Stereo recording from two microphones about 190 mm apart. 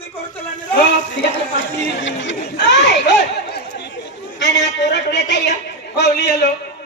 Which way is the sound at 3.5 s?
60° left (ahead or behind).